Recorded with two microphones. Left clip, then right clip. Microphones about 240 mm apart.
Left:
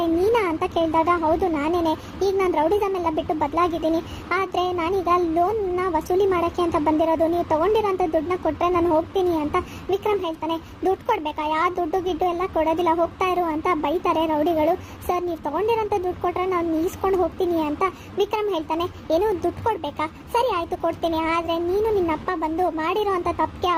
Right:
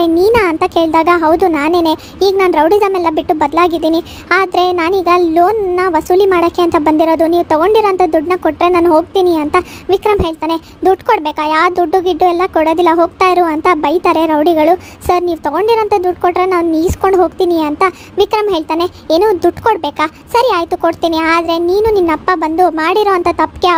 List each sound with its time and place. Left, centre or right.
0.0 s a child's voice: right